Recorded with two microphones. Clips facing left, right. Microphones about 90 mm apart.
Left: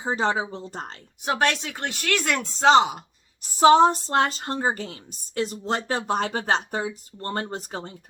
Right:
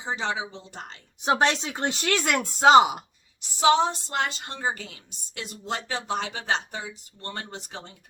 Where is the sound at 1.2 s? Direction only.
20° right (ahead or behind).